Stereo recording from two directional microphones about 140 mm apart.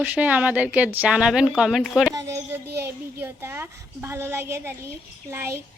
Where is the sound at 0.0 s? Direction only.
10° right (ahead or behind).